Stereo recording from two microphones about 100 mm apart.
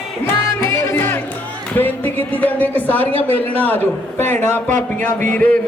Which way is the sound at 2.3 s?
15° left (ahead or behind).